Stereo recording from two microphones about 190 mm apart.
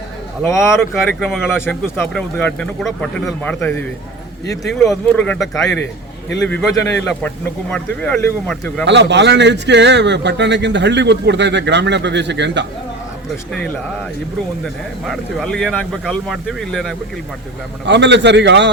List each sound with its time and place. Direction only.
0.6 s speech: centre (ahead or behind)
8.8 s a man's voice: 65° right (ahead or behind)
14.6 s speech: centre (ahead or behind)
17.8 s a man's voice: 65° right (ahead or behind)